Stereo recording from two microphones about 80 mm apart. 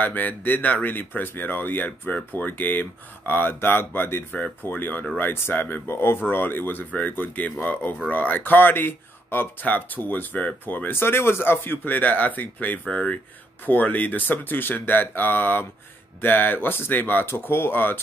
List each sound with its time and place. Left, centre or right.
0.0 s speech: left